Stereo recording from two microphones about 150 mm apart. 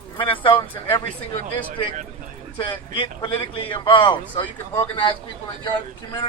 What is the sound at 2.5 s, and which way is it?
Speech, 30° left (ahead or behind).